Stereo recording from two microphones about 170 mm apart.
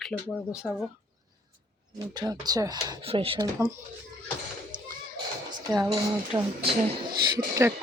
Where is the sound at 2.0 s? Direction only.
25° right (ahead or behind).